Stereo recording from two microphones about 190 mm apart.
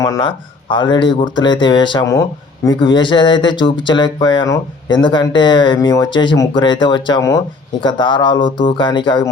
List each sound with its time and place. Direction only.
0.0 s speech: 20° left (ahead or behind)